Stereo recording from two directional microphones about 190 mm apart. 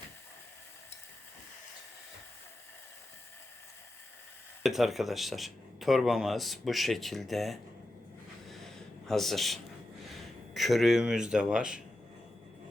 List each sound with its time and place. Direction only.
4.6 s speech: centre (ahead or behind)
8.4 s a sound: centre (ahead or behind)
10.2 s speech: centre (ahead or behind)